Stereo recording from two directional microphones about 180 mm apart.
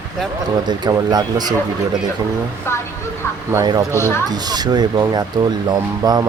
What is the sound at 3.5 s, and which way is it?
Speech, 20° right (ahead or behind).